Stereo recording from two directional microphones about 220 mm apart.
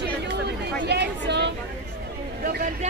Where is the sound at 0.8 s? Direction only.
50° right (ahead or behind).